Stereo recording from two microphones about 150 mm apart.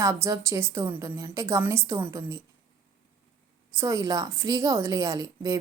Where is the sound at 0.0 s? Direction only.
20° right (ahead or behind).